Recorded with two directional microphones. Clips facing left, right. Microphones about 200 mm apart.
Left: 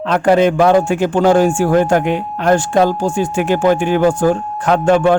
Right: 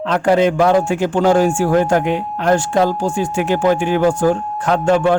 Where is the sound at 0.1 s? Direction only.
55° left (ahead or behind).